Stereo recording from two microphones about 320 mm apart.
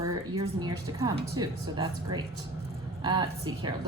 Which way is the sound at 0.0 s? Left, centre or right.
Centre.